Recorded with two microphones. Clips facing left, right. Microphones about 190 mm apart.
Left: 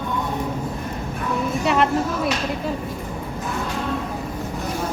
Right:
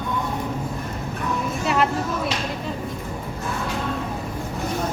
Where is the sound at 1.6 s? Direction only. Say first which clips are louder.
Left 2 dB; centre (ahead or behind).